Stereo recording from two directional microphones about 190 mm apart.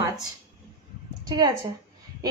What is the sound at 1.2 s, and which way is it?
Speech, 20° right (ahead or behind).